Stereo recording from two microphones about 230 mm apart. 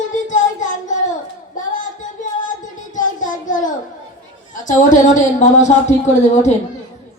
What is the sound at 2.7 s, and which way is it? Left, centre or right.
Child singing, left.